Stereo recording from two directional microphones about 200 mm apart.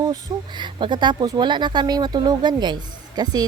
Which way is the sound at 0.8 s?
25° right (ahead or behind).